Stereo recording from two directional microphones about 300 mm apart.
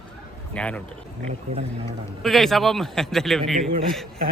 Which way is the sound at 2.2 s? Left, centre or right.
Centre.